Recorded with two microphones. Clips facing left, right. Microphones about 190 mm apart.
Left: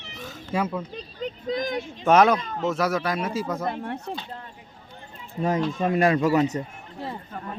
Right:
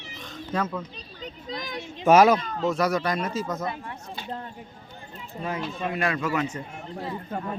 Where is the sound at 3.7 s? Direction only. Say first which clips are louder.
Left 5 dB; 60° left (ahead or behind).